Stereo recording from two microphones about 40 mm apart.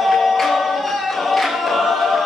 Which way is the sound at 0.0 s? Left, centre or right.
Centre.